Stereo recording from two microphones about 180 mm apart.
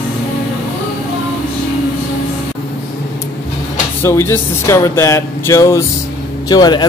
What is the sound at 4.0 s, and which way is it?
Speech, 15° left (ahead or behind).